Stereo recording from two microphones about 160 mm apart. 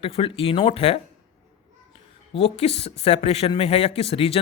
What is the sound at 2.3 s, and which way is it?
Speech, 40° left (ahead or behind).